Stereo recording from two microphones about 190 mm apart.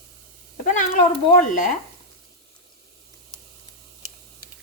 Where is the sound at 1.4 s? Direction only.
45° left (ahead or behind).